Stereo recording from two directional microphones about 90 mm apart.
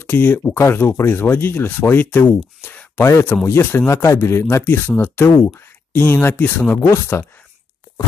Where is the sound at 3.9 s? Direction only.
35° left (ahead or behind).